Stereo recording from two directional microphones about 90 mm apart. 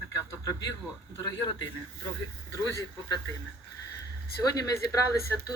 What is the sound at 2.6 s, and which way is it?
Speech, 35° left (ahead or behind).